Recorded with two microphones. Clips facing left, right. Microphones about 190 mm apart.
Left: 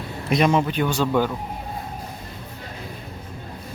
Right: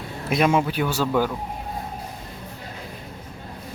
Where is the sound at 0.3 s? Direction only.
5° right (ahead or behind).